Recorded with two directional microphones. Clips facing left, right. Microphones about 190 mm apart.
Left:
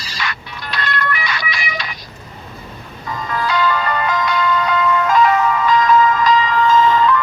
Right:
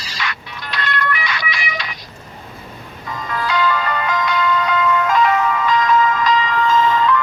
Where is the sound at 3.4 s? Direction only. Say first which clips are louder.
Left 1 dB; 35° left (ahead or behind).